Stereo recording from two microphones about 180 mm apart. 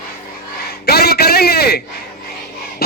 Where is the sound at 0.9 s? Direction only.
60° left (ahead or behind).